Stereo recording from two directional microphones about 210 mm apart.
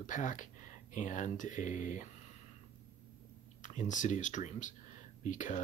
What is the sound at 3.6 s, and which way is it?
Speech, 35° left (ahead or behind).